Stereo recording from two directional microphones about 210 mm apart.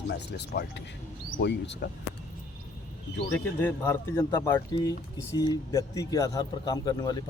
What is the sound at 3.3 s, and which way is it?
A man's voice, 10° left (ahead or behind).